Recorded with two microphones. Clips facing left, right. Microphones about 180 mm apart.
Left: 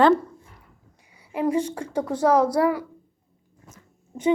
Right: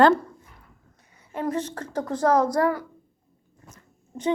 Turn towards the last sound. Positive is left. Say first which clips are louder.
# left 3 dB
turn(degrees=10)  # may be behind; listen again after turning